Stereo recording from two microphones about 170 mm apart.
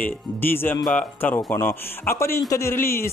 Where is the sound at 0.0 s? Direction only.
10° left (ahead or behind).